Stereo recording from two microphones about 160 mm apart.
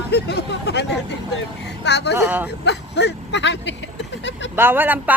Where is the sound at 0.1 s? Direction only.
90° left.